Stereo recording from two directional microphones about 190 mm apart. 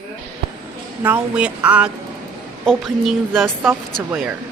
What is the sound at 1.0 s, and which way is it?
A woman's voice, 5° right (ahead or behind).